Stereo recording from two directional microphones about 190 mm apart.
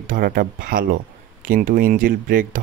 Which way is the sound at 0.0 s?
50° right (ahead or behind).